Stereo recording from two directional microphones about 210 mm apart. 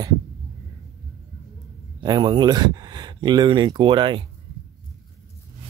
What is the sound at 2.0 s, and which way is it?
Speech, 20° right (ahead or behind).